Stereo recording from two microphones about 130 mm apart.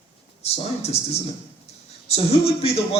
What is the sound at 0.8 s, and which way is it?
A man's voice, 55° left (ahead or behind).